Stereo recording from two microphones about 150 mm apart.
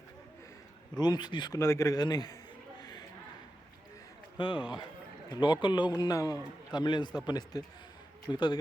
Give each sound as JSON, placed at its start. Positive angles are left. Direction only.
{"t": 0.9, "sound": "a man's voice", "side_deg": 30}
{"t": 1.5, "sound": "a man's voice", "side_deg": 20}
{"t": 4.4, "sound": "a man's voice", "side_deg": 30}